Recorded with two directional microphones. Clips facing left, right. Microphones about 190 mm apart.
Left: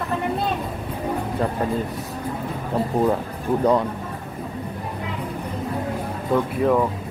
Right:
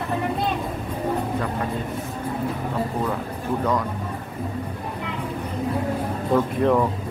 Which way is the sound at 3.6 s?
35° left (ahead or behind).